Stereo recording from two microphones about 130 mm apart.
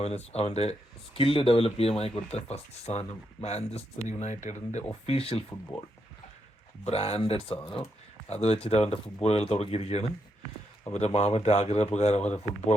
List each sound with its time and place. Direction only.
0.0 s speech: 55° left (ahead or behind)
6.8 s speech: 50° left (ahead or behind)